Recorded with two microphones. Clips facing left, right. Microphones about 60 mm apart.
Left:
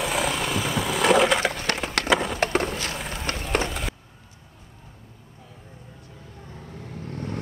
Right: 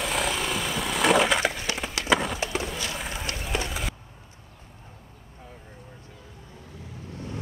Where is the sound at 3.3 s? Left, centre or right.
Left.